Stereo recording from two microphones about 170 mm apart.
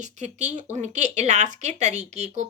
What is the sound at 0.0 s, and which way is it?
A woman's voice, 45° right (ahead or behind).